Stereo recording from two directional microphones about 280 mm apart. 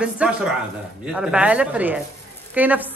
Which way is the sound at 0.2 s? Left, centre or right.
Centre.